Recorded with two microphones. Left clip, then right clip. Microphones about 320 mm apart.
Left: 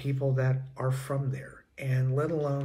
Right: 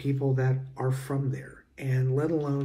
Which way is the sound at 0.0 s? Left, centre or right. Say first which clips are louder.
Right 2 dB; centre.